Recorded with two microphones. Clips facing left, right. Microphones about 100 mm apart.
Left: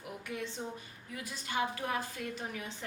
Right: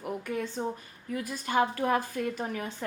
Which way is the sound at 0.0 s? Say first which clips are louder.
Right 7 dB; 45° right (ahead or behind).